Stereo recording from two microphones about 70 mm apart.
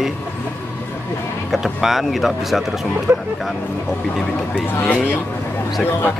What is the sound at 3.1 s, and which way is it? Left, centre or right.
Speech, right.